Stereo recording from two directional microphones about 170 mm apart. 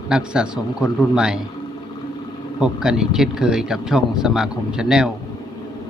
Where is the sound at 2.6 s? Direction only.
5° right (ahead or behind).